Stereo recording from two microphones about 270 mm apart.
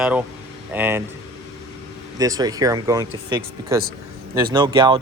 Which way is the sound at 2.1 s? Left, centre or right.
Centre.